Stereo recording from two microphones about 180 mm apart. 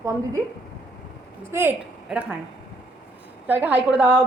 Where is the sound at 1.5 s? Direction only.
10° right (ahead or behind).